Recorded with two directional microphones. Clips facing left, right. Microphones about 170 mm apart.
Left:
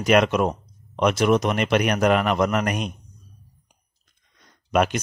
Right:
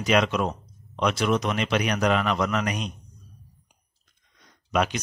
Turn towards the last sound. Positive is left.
turn(degrees=50)  # may be behind; listen again after turning